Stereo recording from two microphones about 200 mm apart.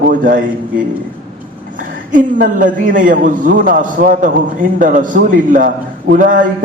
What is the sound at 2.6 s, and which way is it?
A man's voice, 40° right (ahead or behind).